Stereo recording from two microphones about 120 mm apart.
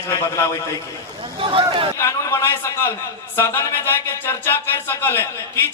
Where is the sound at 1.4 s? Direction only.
45° right (ahead or behind).